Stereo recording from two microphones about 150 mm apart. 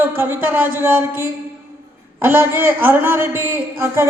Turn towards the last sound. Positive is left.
turn(degrees=-15)  # may be behind; listen again after turning